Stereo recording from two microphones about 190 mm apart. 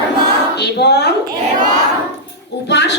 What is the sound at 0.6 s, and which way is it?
Speech, 60° left (ahead or behind).